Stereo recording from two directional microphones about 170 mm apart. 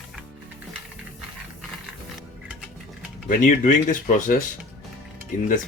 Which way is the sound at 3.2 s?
50° left (ahead or behind).